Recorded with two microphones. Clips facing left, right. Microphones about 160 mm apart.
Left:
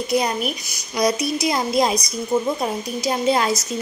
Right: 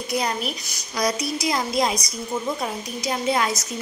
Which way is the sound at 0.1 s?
20° left (ahead or behind).